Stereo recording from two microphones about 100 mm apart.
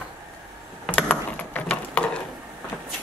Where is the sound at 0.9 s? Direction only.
15° left (ahead or behind).